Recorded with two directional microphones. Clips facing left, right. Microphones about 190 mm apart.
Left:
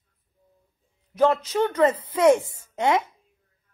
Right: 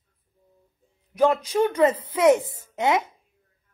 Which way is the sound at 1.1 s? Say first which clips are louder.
Even; 10° right (ahead or behind).